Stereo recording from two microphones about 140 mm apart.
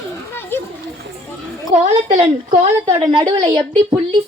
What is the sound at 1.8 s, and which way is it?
A woman's voice, 35° right (ahead or behind).